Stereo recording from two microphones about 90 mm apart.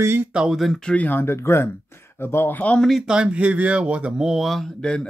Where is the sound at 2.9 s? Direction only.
5° right (ahead or behind).